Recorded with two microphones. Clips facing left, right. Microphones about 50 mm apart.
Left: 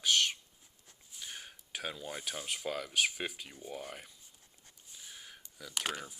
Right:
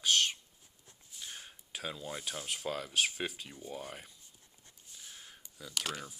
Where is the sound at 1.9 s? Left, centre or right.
Left; by 4.1 s centre.